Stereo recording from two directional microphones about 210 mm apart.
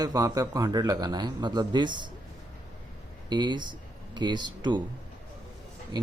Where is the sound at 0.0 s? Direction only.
15° right (ahead or behind).